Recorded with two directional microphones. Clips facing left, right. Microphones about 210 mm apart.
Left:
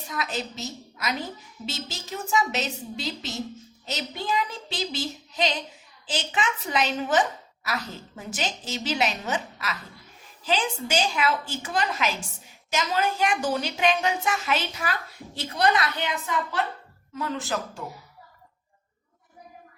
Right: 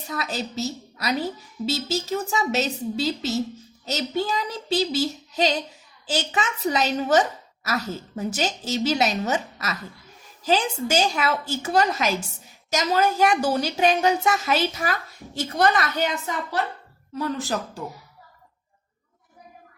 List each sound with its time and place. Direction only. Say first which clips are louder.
0.1 s a woman's voice: right 2 dB; 35° right (ahead or behind)